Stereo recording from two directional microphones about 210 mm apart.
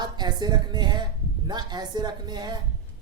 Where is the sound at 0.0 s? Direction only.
20° right (ahead or behind).